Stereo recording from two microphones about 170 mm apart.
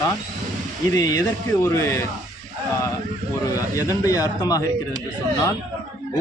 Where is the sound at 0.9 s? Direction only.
20° left (ahead or behind).